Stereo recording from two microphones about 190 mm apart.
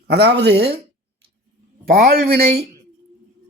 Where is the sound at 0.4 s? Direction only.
60° right (ahead or behind).